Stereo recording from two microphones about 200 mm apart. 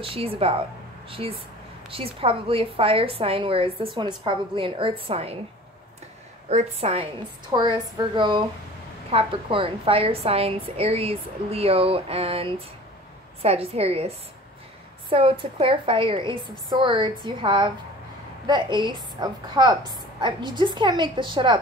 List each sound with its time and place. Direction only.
0.0 s a woman's voice: 30° right (ahead or behind)
6.5 s a woman's voice: 30° right (ahead or behind)